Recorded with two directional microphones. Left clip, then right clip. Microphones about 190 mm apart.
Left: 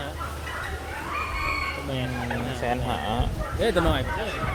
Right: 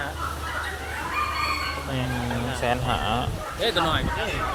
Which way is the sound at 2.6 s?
Centre (ahead or behind).